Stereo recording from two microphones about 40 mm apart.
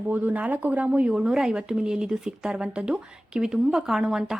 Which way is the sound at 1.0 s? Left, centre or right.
Right.